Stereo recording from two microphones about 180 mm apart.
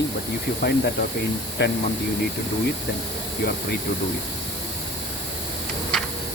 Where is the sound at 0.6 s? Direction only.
60° left (ahead or behind).